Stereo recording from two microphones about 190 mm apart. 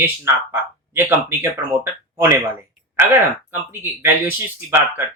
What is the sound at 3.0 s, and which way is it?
Speech, 35° right (ahead or behind).